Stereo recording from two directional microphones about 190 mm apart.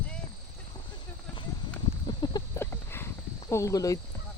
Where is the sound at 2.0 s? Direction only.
20° left (ahead or behind).